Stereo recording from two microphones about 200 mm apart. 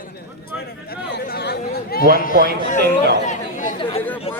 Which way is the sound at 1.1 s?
50° left (ahead or behind).